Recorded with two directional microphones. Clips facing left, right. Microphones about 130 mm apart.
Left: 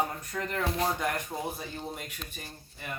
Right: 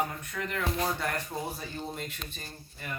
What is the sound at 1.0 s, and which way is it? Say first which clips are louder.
Speech: left 1 dB; 15° left (ahead or behind).